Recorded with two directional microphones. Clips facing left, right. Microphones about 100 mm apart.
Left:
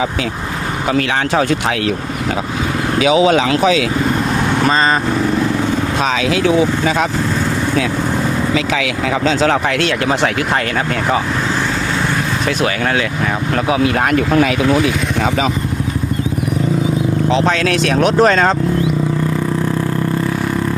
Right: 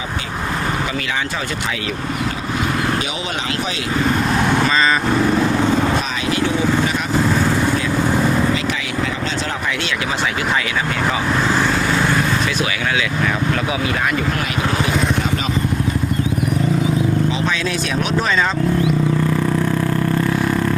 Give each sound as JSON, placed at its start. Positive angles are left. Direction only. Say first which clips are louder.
{"t": 6.0, "sound": "speech", "louder": "left 5 dB", "side_deg": 90}
{"t": 9.5, "sound": "speech", "louder": "left 8 dB", "side_deg": 65}
{"t": 13.7, "sound": "speech", "louder": "left 6 dB", "side_deg": 60}
{"t": 17.3, "sound": "speech", "louder": "left 6 dB", "side_deg": 70}